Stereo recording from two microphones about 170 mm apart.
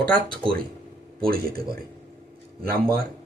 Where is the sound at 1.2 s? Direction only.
60° right (ahead or behind).